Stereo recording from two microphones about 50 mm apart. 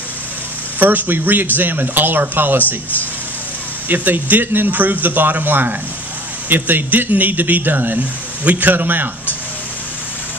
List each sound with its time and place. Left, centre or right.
0.7 s speech: right
3.9 s speech: right